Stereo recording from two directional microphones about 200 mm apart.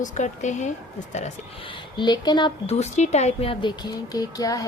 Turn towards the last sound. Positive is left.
turn(degrees=15)  # may be behind; listen again after turning